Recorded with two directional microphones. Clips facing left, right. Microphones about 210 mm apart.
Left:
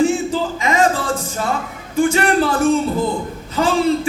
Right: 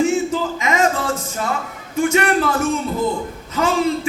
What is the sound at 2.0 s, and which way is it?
A man's voice, 30° left (ahead or behind).